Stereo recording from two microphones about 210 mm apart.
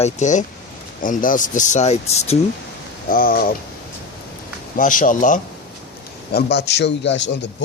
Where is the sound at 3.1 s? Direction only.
40° left (ahead or behind).